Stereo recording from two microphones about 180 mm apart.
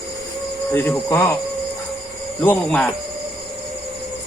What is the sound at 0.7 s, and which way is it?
Speech, 10° left (ahead or behind).